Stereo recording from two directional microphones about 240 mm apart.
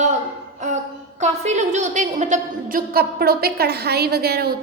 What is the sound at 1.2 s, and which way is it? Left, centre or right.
A woman's voice, right.